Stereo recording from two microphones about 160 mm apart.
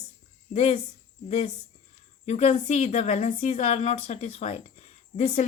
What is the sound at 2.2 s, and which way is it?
Speech, 45° left (ahead or behind).